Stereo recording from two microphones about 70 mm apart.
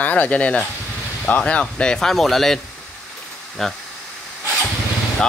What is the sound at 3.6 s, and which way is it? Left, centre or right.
Speech, centre.